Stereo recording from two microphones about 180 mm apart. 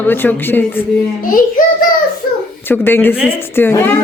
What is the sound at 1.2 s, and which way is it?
Speech, 50° left (ahead or behind).